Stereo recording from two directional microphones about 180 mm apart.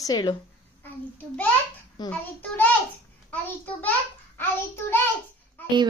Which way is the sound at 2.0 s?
10° left (ahead or behind).